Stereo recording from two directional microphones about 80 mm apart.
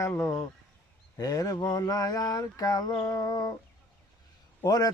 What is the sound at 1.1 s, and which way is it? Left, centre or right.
Speech, left.